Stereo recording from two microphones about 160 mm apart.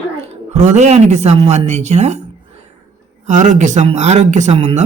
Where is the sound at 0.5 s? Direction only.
45° right (ahead or behind).